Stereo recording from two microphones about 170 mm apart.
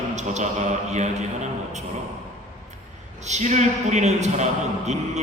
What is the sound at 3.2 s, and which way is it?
A man's voice, 45° right (ahead or behind).